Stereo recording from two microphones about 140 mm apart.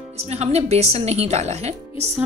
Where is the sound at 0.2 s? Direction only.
50° right (ahead or behind).